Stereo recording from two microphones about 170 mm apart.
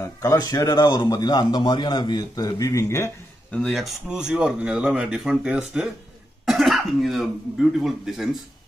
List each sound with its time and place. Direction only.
0.0 s a man's voice: 20° left (ahead or behind)
3.5 s speech: centre (ahead or behind)